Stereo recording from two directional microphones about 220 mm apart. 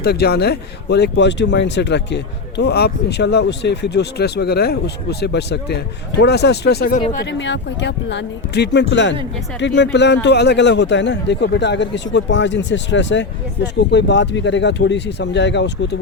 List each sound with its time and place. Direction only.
0.0 s speech: 45° left (ahead or behind)
7.3 s speech: 55° left (ahead or behind)